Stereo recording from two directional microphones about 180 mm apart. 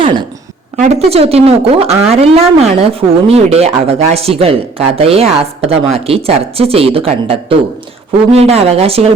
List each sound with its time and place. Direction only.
0.0 s a woman's voice: 25° right (ahead or behind)